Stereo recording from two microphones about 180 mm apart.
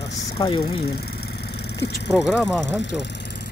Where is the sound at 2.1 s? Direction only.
5° right (ahead or behind).